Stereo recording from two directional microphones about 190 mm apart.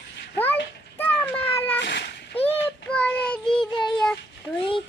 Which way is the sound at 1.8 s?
65° left (ahead or behind).